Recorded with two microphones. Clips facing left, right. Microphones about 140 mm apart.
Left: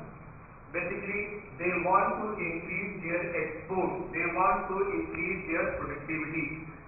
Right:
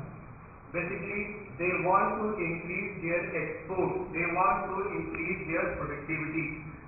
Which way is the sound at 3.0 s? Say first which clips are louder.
Even; centre (ahead or behind).